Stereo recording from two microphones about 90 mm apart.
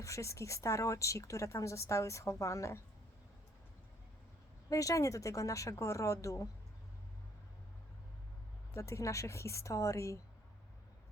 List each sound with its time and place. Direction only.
0.0 s a woman's voice: 35° left (ahead or behind)
4.7 s a woman's voice: 40° left (ahead or behind)
8.7 s a woman's voice: 35° left (ahead or behind)